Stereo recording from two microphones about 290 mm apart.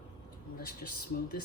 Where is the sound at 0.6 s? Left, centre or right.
Left.